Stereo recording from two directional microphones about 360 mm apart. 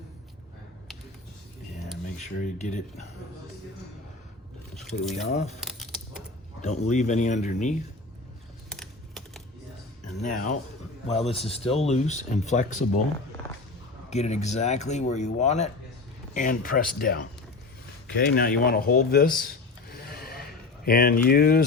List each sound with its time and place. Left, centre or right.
2.0 s speech: centre
4.7 s speech: centre
5.2 s speech: centre
5.6 s a sound: centre
6.6 s speech: centre
8.7 s typing: centre
10.2 s speech: left
14.1 s speech: centre
18.3 s speech: left
19.4 s a sound: left
20.8 s speech: left